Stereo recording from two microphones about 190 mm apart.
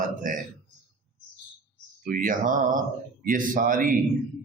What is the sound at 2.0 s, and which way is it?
Speech, 45° right (ahead or behind).